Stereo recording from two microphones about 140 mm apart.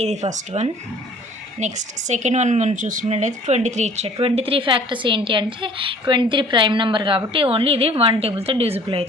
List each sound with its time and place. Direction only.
0.0 s a woman's voice: 55° right (ahead or behind)